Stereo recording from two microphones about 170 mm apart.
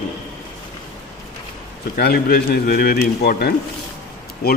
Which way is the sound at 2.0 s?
65° left (ahead or behind).